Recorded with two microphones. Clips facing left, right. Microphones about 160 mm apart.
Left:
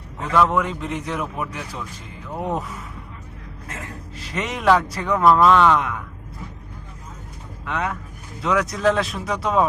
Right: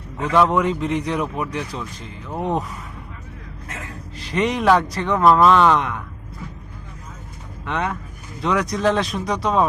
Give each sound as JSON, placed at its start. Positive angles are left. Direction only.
{"t": 0.4, "sound": "a man's voice", "side_deg": 0}
{"t": 4.2, "sound": "a man's voice", "side_deg": 0}
{"t": 7.6, "sound": "a man's voice", "side_deg": 0}